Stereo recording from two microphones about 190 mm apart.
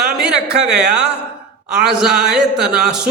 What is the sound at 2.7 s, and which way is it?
Speech, 5° right (ahead or behind).